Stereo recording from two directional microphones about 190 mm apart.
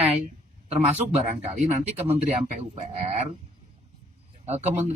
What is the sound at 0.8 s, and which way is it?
Speech, 40° right (ahead or behind).